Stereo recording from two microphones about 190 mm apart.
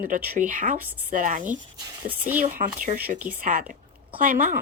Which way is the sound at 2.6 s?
45° right (ahead or behind).